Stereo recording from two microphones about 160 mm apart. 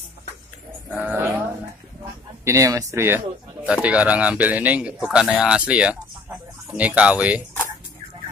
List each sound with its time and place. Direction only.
0.9 s speech: 10° right (ahead or behind)
2.4 s speech: 20° right (ahead or behind)